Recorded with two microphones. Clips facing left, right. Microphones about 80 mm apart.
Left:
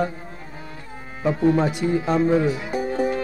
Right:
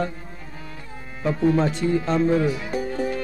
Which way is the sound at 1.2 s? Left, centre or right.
Centre.